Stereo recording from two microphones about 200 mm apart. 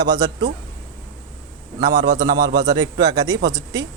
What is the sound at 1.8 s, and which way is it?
Speech, 20° right (ahead or behind).